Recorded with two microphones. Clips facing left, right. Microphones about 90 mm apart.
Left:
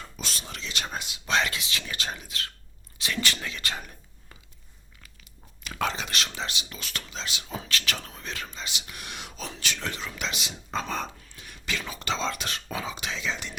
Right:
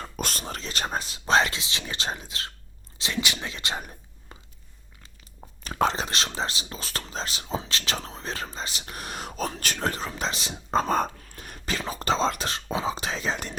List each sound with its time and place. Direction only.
0.0 s speech: 50° right (ahead or behind); by 4.4 s 25° right (ahead or behind)
5.6 s speech: 35° right (ahead or behind)